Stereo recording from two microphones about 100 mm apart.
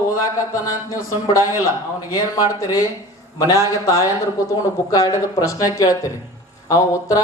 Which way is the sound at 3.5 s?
30° left (ahead or behind).